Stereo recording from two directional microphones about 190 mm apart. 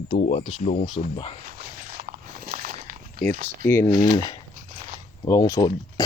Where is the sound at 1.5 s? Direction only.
50° right (ahead or behind).